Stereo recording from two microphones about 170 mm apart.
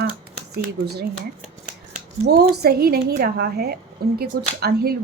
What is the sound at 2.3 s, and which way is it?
A woman's voice, 65° right (ahead or behind).